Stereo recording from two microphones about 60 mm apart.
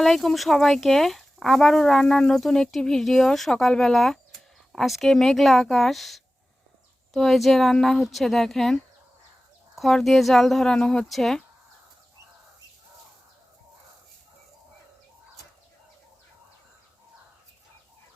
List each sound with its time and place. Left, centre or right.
0.0 s speech: centre
9.7 s speech: centre